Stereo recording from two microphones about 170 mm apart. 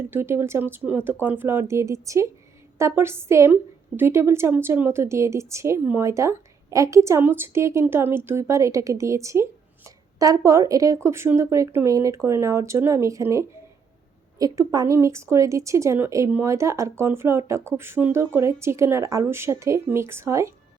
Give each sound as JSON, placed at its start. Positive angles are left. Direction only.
{"t": 0.1, "sound": "a woman's voice", "side_deg": -15}